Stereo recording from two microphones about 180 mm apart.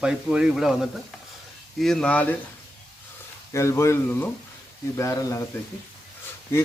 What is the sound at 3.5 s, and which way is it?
Speech, 15° left (ahead or behind).